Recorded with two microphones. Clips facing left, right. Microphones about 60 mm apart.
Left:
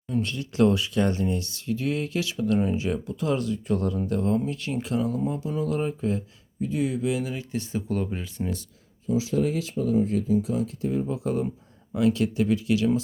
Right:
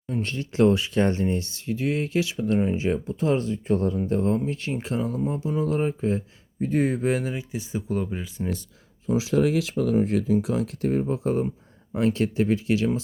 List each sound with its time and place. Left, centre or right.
0.1 s speech: right
6.7 s speech: right
7.5 s speech: centre
9.0 s speech: right
11.1 s speech: right